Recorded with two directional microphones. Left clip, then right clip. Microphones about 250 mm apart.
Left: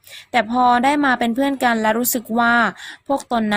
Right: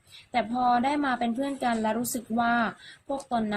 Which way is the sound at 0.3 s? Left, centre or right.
Left.